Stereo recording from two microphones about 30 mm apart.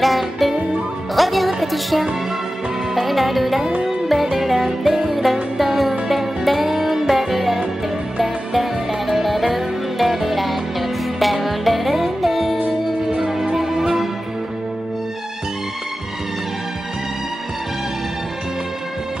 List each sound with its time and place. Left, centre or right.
0.0 s music: centre